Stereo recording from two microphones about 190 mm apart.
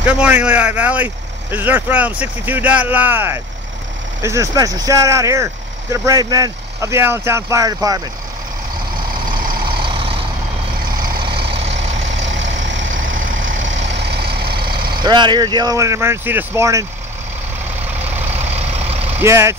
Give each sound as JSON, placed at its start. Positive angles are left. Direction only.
{"t": 0.0, "sound": "speech", "side_deg": -5}
{"t": 9.7, "sound": "vehicle", "side_deg": -25}
{"t": 12.4, "sound": "vehicle", "side_deg": -75}
{"t": 13.9, "sound": "vehicle", "side_deg": -60}
{"t": 15.0, "sound": "speech", "side_deg": -25}
{"t": 18.3, "sound": "vehicle", "side_deg": -35}
{"t": 19.1, "sound": "speech", "side_deg": -15}